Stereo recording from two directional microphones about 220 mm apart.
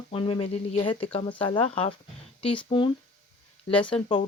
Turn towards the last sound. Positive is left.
turn(degrees=25)  # may be behind; listen again after turning